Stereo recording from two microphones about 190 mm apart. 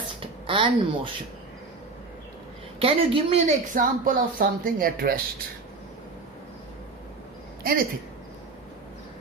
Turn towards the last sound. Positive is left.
turn(degrees=-50)  # may be behind; listen again after turning